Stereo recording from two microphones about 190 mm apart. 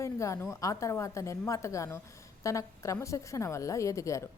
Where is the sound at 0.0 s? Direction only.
15° left (ahead or behind).